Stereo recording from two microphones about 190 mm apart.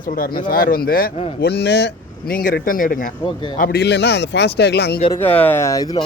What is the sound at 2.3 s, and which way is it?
A man's voice, 50° left (ahead or behind).